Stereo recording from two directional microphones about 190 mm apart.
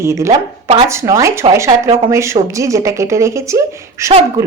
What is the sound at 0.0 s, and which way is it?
A woman's voice, 15° right (ahead or behind).